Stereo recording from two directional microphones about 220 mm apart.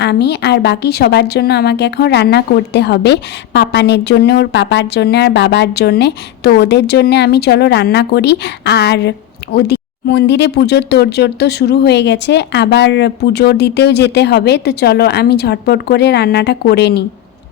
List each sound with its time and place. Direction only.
0.0 s a woman's voice: 50° left (ahead or behind)